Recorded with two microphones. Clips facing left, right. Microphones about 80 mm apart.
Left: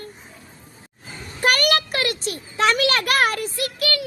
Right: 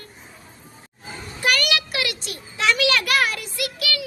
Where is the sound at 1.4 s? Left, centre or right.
Left.